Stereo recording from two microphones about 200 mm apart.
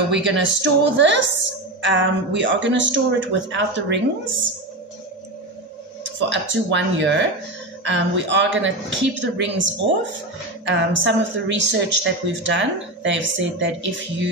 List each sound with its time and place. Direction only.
0.2 s speech: 65° right (ahead or behind)
6.2 s speech: 65° right (ahead or behind)